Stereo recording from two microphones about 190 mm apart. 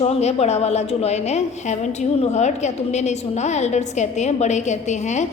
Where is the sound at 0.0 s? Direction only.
35° left (ahead or behind).